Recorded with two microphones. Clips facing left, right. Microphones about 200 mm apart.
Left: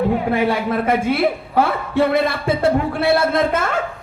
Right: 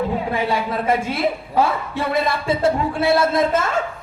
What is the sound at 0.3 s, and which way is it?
A woman's voice, 60° left (ahead or behind).